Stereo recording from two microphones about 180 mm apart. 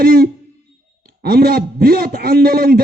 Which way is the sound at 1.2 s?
55° right (ahead or behind).